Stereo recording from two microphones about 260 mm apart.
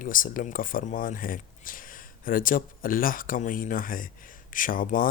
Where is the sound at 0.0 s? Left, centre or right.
Left.